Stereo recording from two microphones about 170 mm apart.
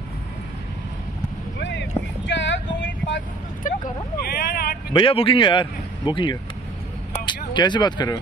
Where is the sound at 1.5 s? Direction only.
90° left.